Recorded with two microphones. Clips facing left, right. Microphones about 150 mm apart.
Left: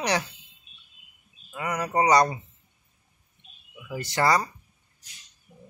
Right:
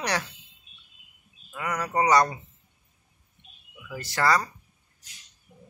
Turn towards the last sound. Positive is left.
turn(degrees=20)  # may be behind; listen again after turning